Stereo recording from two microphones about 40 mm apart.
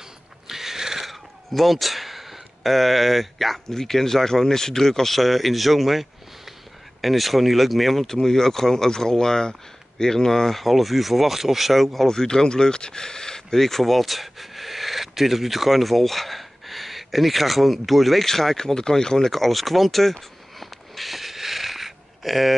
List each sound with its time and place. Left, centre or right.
0.5 s a sound: centre
1.0 s speech: centre
12.1 s speech: centre
13.6 s speech: centre